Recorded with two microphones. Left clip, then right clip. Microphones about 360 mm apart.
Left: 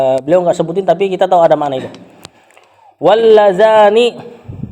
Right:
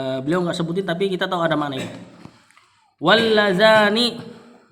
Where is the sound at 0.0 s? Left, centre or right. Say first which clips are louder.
Left 12 dB; centre.